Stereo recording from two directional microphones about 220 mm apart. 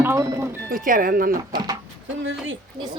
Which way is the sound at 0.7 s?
40° right (ahead or behind).